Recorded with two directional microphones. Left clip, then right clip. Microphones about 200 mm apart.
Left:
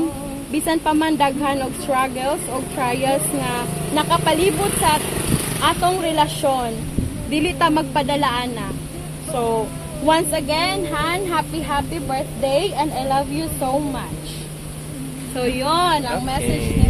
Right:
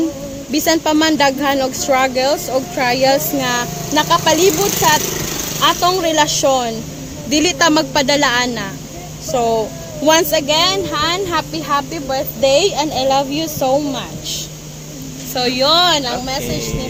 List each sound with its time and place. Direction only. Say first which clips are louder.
0.5 s speech: right 5 dB; 50° right (ahead or behind)
15.4 s speech: right 6 dB; 55° right (ahead or behind)